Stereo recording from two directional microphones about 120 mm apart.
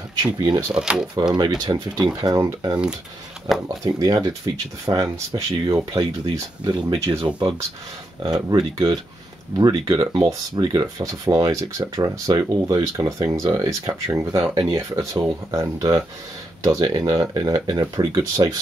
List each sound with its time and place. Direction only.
0.2 s speech: 35° right (ahead or behind)
0.7 s speech: 5° right (ahead or behind)
1.3 s speech: 35° right (ahead or behind)
8.2 s speech: 35° right (ahead or behind)